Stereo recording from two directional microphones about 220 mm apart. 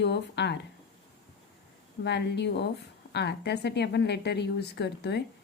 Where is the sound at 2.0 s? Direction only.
50° left (ahead or behind).